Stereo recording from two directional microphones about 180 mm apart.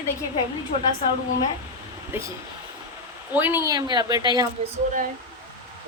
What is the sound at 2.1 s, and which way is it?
Speech, 10° right (ahead or behind).